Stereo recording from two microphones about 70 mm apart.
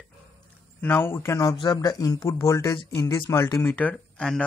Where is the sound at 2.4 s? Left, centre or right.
Left.